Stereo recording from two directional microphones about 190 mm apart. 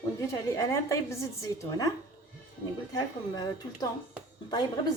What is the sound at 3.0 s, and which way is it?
Speech, 20° left (ahead or behind).